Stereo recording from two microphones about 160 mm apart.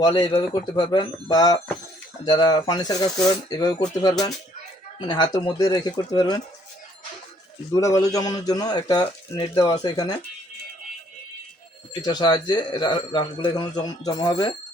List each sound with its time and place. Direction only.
0.0 s speech: 30° left (ahead or behind)
4.9 s speech: 25° left (ahead or behind)
7.7 s speech: 20° left (ahead or behind)
12.0 s speech: 25° left (ahead or behind)